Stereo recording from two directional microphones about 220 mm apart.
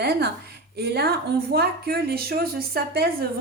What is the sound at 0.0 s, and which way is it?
A woman's voice, 45° right (ahead or behind).